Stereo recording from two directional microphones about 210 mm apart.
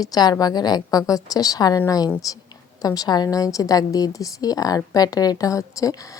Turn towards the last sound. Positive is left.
turn(degrees=15)  # may be behind; listen again after turning